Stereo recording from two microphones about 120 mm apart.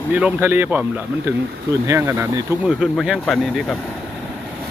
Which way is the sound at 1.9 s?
25° right (ahead or behind).